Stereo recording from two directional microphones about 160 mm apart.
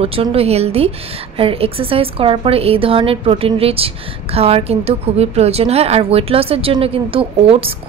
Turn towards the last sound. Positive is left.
turn(degrees=-35)  # may be behind; listen again after turning